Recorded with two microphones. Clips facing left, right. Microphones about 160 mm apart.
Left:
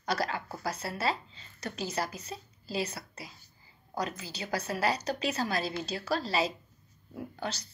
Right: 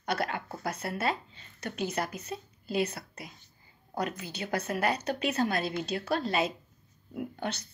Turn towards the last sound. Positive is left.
turn(degrees=-55)  # may be behind; listen again after turning